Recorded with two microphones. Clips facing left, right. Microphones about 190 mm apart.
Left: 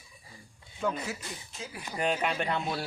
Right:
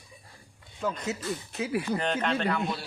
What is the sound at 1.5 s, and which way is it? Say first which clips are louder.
Speech: right 15 dB; 70° right (ahead or behind).